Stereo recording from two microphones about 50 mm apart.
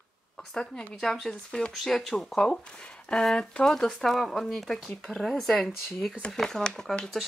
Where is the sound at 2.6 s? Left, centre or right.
Centre.